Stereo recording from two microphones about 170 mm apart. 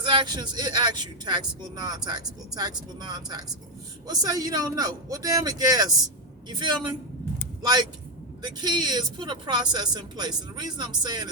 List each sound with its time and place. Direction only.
0.0 s speech: 25° right (ahead or behind)